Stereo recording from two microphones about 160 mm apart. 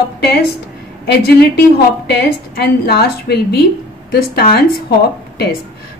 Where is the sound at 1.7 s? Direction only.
90° left.